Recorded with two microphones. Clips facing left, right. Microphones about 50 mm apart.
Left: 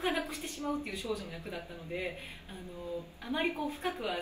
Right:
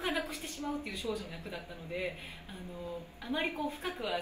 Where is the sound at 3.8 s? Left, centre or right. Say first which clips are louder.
Left 1 dB; left.